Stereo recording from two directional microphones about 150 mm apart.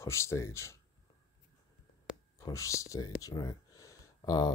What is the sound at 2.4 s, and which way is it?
Speech, 20° left (ahead or behind).